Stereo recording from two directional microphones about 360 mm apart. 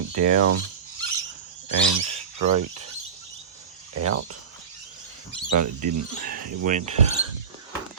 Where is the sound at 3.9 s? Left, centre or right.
Right.